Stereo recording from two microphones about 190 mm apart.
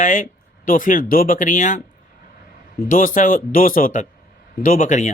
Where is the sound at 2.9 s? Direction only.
45° left (ahead or behind).